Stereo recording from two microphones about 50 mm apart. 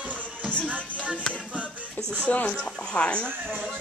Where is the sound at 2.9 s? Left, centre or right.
Centre.